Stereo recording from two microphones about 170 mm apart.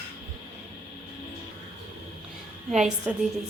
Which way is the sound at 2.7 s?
5° right (ahead or behind).